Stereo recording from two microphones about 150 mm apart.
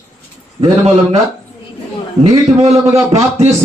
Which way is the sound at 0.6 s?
40° right (ahead or behind).